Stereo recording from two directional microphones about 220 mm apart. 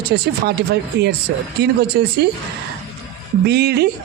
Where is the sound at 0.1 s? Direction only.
50° right (ahead or behind).